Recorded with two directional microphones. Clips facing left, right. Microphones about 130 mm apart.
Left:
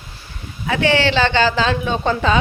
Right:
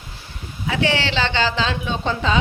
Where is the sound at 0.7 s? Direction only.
50° left (ahead or behind).